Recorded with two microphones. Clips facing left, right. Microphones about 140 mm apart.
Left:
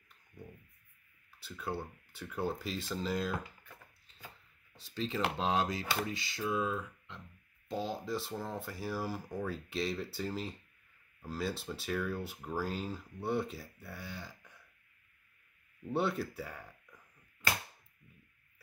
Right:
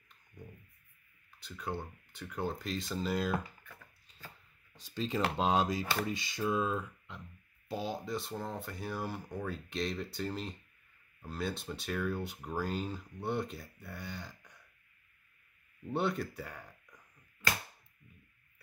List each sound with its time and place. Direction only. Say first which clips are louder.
1.4 s speech: even; 5° left (ahead or behind)
4.7 s speech: right 2 dB; 15° right (ahead or behind)
5.4 s a sound: right 4 dB; 15° right (ahead or behind)
7.6 s speech: even; 5° right (ahead or behind)
15.9 s speech: even; centre (ahead or behind)